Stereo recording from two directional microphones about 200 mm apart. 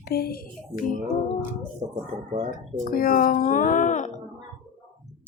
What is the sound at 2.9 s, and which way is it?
Speech, 45° left (ahead or behind).